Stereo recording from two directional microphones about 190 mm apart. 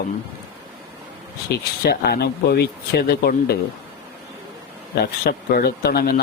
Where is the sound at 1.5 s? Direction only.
60° left (ahead or behind).